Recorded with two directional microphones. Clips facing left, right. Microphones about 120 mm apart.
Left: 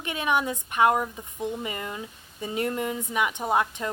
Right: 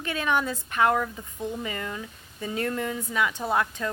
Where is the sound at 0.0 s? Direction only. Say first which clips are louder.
Even; 15° left (ahead or behind).